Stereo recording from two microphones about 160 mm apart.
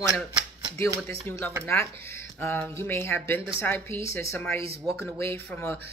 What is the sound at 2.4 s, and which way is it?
Speech, 15° left (ahead or behind).